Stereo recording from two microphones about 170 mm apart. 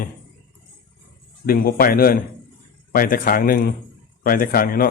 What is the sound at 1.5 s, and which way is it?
Speech, 60° left (ahead or behind).